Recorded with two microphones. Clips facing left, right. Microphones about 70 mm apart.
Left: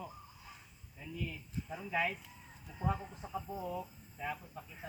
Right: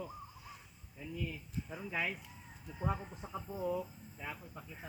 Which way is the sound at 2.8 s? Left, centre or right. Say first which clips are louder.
Left 1 dB; centre.